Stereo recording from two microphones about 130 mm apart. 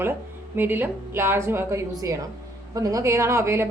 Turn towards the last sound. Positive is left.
turn(degrees=-20)  # may be behind; listen again after turning